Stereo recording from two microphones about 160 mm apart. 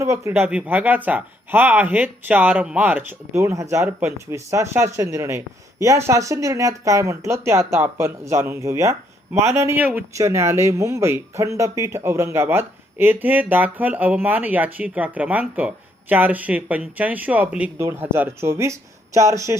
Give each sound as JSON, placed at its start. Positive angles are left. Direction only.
{"t": 0.0, "sound": "speech", "side_deg": -15}